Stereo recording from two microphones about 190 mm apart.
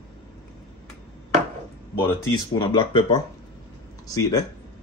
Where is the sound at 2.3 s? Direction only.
25° left (ahead or behind).